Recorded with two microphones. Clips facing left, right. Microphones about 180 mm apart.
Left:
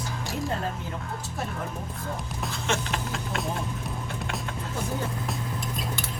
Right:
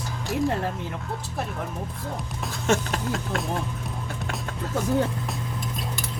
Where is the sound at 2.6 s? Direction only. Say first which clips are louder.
Right 6 dB; 45° right (ahead or behind).